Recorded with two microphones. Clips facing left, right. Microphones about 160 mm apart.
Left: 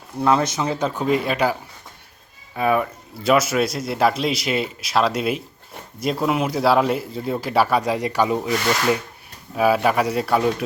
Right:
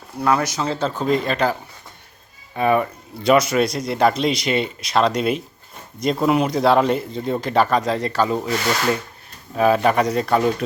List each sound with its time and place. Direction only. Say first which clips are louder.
0.3 s speech: left 1 dB; 20° left (ahead or behind)
2.6 s speech: right 2 dB; centre (ahead or behind)